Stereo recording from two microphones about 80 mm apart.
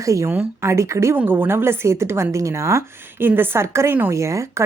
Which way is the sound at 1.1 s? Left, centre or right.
Right.